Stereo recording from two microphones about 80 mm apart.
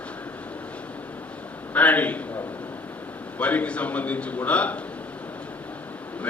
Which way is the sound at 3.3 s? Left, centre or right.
Centre.